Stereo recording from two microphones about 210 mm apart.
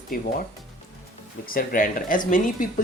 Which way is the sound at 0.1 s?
45° left (ahead or behind).